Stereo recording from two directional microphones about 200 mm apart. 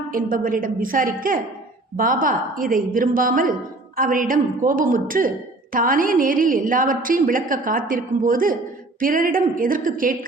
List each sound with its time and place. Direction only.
0.1 s a woman's voice: 40° right (ahead or behind)